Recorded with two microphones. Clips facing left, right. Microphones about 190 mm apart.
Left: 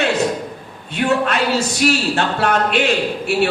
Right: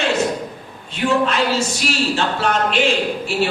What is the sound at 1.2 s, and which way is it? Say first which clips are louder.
A man's voice: even; 60° left (ahead or behind).